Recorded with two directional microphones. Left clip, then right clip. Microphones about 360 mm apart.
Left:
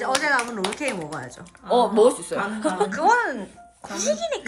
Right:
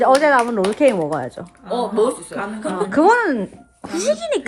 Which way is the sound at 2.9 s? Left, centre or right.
Centre.